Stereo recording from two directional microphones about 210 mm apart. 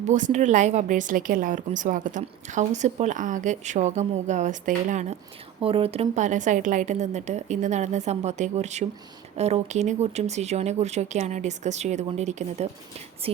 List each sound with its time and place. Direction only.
0.0 s a woman's voice: 35° right (ahead or behind)